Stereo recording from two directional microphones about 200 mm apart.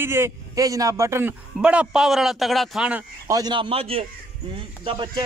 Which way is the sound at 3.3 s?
25° right (ahead or behind).